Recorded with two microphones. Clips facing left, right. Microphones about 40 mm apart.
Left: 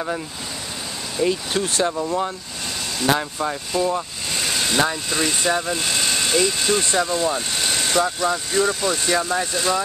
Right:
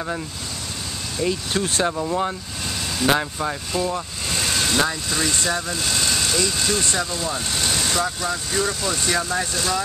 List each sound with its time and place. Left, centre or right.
1.1 s speech: centre
3.3 s speech: centre